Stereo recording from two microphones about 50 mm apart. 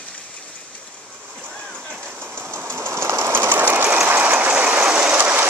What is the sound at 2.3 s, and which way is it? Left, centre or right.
Train, right.